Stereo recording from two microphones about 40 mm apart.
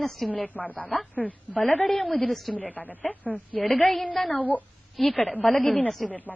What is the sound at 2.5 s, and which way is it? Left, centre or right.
Speech, left.